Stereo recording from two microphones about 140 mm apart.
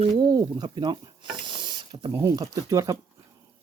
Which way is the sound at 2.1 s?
25° right (ahead or behind).